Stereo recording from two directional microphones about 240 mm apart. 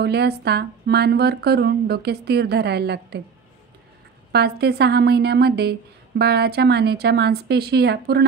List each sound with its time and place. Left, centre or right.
0.0 s a woman's voice: right
4.3 s a woman's voice: right